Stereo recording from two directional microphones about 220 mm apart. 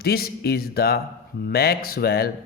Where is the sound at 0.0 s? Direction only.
45° left (ahead or behind).